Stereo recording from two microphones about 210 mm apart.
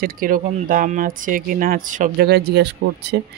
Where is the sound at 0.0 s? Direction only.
40° right (ahead or behind).